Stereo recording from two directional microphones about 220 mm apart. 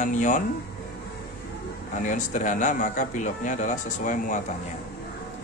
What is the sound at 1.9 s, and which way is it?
Speech, 35° left (ahead or behind).